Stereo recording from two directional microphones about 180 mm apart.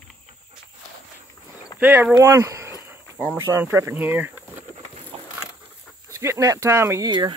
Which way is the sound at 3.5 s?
15° right (ahead or behind).